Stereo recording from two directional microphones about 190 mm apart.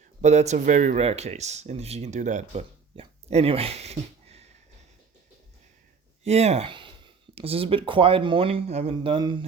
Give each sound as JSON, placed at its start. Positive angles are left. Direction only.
{"t": 0.2, "sound": "speech", "side_deg": -35}
{"t": 6.2, "sound": "speech", "side_deg": -35}